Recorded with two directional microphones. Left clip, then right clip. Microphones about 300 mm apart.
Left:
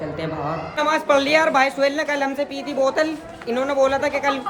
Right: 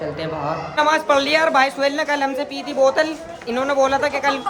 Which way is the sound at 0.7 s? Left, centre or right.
Centre.